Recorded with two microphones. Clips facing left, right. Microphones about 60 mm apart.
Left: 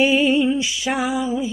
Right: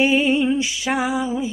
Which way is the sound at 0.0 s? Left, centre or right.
Right.